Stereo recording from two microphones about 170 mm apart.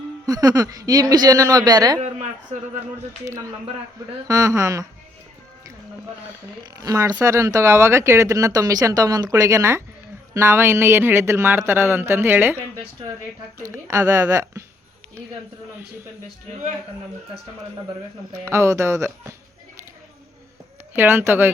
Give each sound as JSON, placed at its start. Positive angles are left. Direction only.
{"t": 0.3, "sound": "speech", "side_deg": -20}
{"t": 2.0, "sound": "a woman's voice", "side_deg": -40}
{"t": 3.2, "sound": "speech", "side_deg": -20}
{"t": 6.6, "sound": "speech", "side_deg": -20}
{"t": 18.4, "sound": "speech", "side_deg": -15}
{"t": 20.9, "sound": "speech", "side_deg": -10}